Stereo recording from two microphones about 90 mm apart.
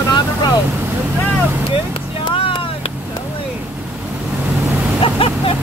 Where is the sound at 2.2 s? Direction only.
75° left (ahead or behind).